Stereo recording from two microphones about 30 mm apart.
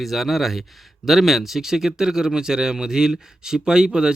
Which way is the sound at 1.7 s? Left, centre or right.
Centre.